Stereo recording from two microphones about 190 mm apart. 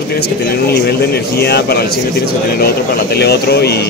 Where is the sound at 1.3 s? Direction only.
60° left (ahead or behind).